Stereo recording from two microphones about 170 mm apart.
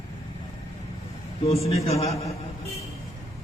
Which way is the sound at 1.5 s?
35° left (ahead or behind).